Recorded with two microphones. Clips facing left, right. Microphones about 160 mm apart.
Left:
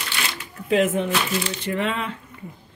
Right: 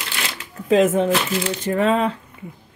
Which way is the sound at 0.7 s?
40° right (ahead or behind).